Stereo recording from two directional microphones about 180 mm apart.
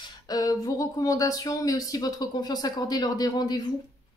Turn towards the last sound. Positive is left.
turn(degrees=25)  # may be behind; listen again after turning